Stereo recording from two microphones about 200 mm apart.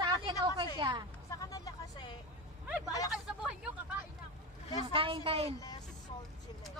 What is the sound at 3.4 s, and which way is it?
Speech, 5° right (ahead or behind).